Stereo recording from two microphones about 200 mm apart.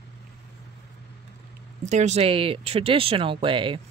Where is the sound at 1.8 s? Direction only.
35° right (ahead or behind).